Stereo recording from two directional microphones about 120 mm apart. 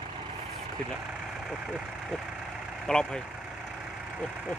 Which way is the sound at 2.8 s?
5° left (ahead or behind).